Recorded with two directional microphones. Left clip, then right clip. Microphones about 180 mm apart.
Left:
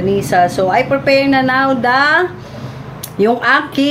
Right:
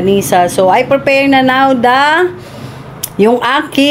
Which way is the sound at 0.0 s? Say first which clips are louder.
Right 3 dB; 50° right (ahead or behind).